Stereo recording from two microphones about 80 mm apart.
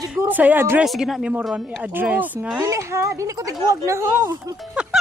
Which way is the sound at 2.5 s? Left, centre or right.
Right.